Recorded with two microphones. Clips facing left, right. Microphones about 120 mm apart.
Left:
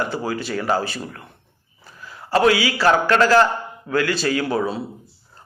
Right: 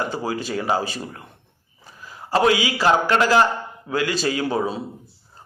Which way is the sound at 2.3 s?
20° right (ahead or behind).